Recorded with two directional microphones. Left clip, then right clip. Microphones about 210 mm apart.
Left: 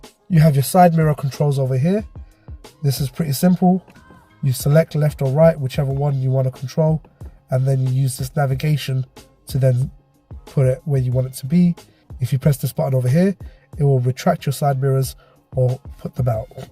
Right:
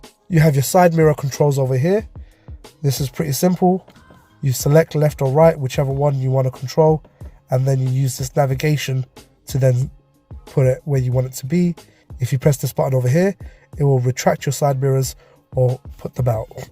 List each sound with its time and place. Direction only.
0.3 s speech: 35° right (ahead or behind)
15.6 s speech: centre (ahead or behind)
16.0 s speech: 35° right (ahead or behind)